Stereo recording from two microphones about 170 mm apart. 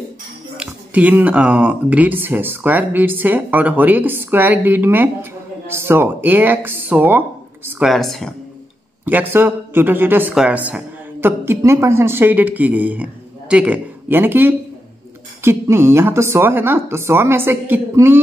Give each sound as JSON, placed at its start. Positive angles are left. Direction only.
{"t": 0.6, "sound": "speech", "side_deg": -10}
{"t": 7.9, "sound": "speech", "side_deg": 0}
{"t": 9.0, "sound": "speech", "side_deg": -10}